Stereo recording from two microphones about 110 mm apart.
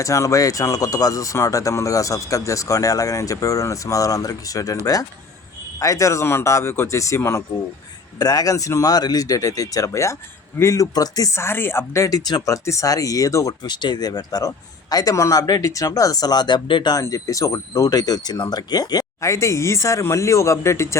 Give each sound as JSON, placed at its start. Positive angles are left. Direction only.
{"t": 0.0, "sound": "speech", "side_deg": 30}
{"t": 5.8, "sound": "speech", "side_deg": 30}
{"t": 8.2, "sound": "speech", "side_deg": 35}